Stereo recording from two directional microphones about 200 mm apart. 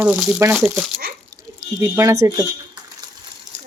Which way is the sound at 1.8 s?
15° right (ahead or behind).